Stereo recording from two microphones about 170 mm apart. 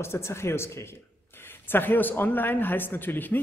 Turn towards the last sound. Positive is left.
turn(degrees=10)  # may be behind; listen again after turning